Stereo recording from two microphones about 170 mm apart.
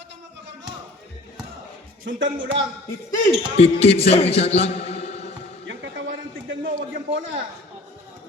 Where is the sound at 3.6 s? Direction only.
35° left (ahead or behind).